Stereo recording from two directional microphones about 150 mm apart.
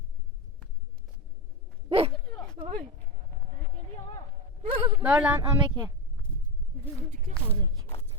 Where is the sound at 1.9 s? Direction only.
40° right (ahead or behind).